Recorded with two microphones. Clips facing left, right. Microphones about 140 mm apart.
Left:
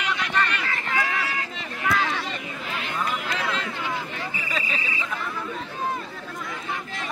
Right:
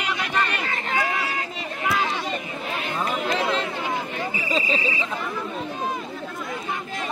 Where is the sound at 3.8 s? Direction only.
45° right (ahead or behind).